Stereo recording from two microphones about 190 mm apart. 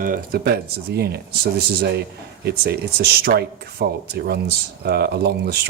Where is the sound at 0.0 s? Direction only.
50° right (ahead or behind).